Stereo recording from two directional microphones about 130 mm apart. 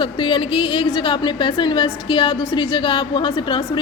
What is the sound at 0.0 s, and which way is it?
A woman's voice, 40° left (ahead or behind).